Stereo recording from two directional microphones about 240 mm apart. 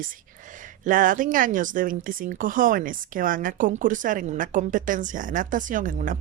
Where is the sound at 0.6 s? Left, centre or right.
Right.